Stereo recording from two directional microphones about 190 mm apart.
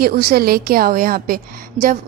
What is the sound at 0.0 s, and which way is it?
A woman's voice, 50° right (ahead or behind).